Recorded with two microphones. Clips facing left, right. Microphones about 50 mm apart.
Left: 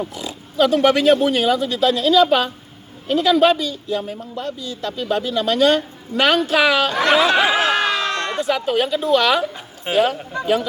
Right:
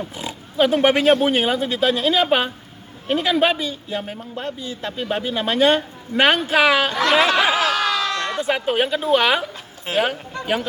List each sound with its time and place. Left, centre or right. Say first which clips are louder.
0.2 s a man's voice: left 1 dB; right
3.4 s a man's voice: left 4 dB; centre
4.0 s a man's voice: left 2 dB; right
6.9 s speech: left 2 dB; left
7.5 s a sound: left 2 dB; left
8.4 s speech: left 1 dB; right
9.0 s a man's voice: left 2 dB; right